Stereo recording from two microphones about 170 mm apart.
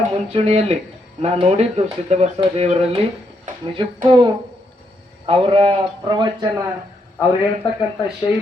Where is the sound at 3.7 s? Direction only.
25° right (ahead or behind).